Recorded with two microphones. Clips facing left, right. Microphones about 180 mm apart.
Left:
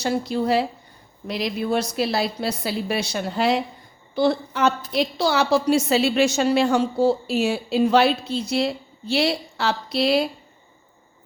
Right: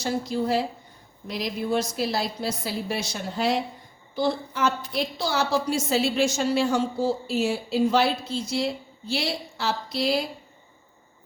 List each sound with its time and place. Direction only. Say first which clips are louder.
0.0 s a woman's voice: left 3 dB; 70° left (ahead or behind)